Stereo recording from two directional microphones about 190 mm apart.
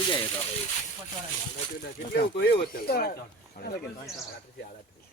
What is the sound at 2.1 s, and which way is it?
Speech, 60° left (ahead or behind).